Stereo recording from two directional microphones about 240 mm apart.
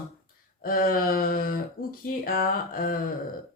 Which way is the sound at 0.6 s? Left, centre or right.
Left.